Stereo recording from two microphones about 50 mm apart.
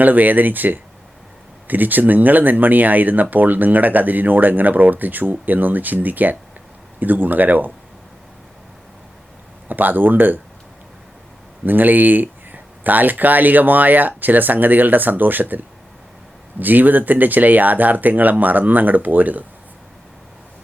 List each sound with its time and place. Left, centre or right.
0.0 s speech: right
9.6 s speech: right
11.6 s speech: right